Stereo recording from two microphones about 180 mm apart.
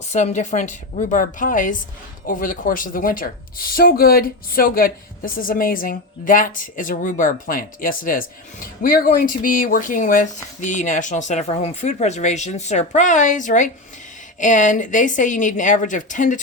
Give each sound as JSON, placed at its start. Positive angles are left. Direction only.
{"t": 0.1, "sound": "speech", "side_deg": 40}